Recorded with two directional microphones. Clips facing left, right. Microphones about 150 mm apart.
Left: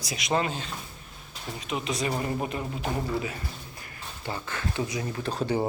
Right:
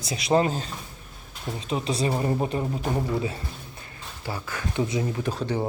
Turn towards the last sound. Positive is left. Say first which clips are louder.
# left 1 dB
turn(degrees=10)  # may be behind; listen again after turning